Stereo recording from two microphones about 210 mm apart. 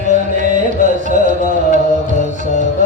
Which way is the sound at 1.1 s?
35° right (ahead or behind).